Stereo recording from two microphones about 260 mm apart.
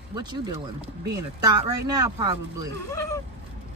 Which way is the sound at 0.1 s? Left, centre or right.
Centre.